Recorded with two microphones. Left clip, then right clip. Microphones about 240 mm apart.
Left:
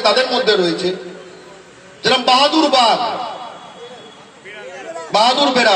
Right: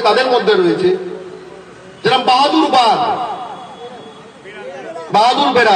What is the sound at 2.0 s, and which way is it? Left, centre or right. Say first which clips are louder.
Speech: right 1 dB; left.